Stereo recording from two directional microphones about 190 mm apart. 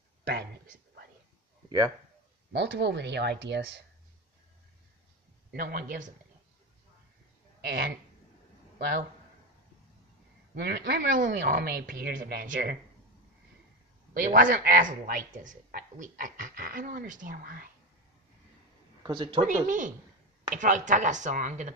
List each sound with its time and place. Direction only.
0.2 s a sound: 55° right (ahead or behind)
2.5 s speech: 65° right (ahead or behind)
5.5 s a woman's voice: 50° right (ahead or behind)
7.6 s a man's voice: 55° right (ahead or behind)
10.5 s a woman's voice: 55° right (ahead or behind)
14.1 s a woman's voice: 45° right (ahead or behind)
19.0 s speech: 25° right (ahead or behind)
19.4 s a woman's voice: 40° right (ahead or behind)